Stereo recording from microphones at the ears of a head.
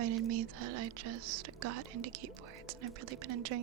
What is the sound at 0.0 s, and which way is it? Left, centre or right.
Speech, right.